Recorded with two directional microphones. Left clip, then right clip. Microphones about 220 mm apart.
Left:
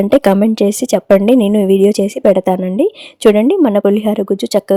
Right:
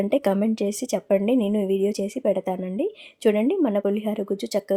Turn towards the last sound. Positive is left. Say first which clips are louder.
# left 11 dB
turn(degrees=35)  # may be behind; listen again after turning